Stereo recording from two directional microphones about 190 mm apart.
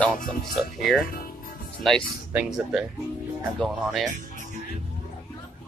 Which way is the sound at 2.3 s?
5° right (ahead or behind).